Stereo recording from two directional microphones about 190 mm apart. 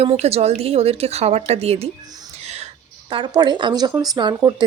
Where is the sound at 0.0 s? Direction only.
35° right (ahead or behind).